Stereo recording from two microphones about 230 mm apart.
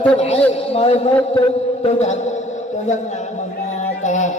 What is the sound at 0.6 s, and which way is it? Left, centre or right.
A man's voice, left.